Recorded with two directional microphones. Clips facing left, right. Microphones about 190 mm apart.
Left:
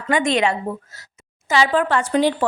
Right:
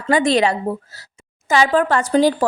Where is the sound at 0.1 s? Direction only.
35° right (ahead or behind).